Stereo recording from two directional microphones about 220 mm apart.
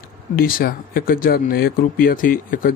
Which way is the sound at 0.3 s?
40° left (ahead or behind).